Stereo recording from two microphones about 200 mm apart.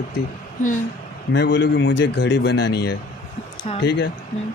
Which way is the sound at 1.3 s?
65° left (ahead or behind).